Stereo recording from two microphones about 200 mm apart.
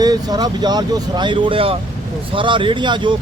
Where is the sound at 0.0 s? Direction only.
20° right (ahead or behind).